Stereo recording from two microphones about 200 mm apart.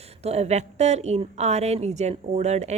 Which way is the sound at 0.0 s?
30° right (ahead or behind).